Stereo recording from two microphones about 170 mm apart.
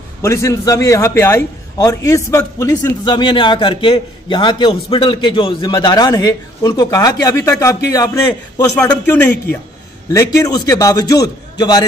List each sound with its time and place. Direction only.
0.2 s a man's voice: 15° left (ahead or behind)
10.1 s a man's voice: 20° left (ahead or behind)